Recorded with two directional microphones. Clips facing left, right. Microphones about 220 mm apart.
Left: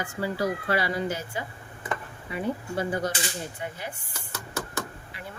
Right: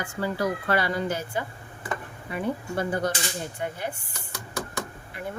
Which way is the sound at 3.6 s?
50° right (ahead or behind).